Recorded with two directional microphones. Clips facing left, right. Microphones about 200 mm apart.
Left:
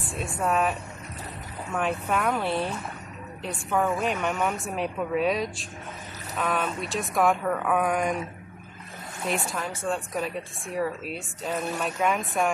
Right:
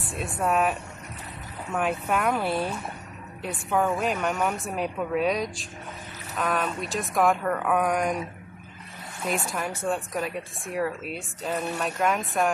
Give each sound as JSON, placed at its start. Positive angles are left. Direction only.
{"t": 0.0, "sound": "a sound", "side_deg": 0}
{"t": 0.4, "sound": "a woman's voice", "side_deg": -5}
{"t": 9.3, "sound": "a woman's voice", "side_deg": 0}